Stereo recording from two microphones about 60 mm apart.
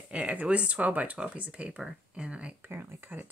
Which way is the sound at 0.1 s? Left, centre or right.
Right.